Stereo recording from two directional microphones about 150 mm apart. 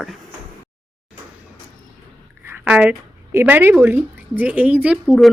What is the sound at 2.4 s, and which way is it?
A woman's voice, 10° right (ahead or behind).